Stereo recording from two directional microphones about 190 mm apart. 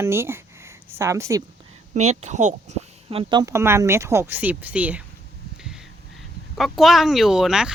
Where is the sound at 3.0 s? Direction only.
25° right (ahead or behind); by 5.0 s 5° right (ahead or behind).